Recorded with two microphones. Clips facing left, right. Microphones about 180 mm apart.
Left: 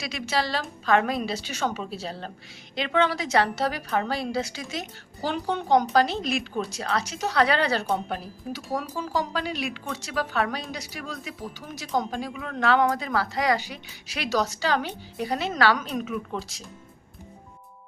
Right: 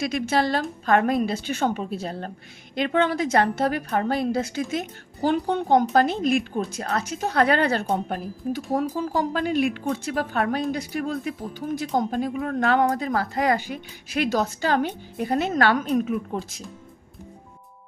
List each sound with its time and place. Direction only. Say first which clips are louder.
0.0 s a woman's voice: right 5 dB; 50° right (ahead or behind)